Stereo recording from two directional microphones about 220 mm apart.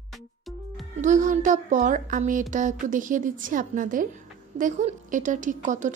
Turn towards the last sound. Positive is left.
turn(degrees=-35)  # may be behind; listen again after turning